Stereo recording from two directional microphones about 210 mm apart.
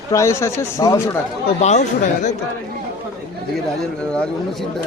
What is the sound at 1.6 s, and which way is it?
Speech, 35° left (ahead or behind).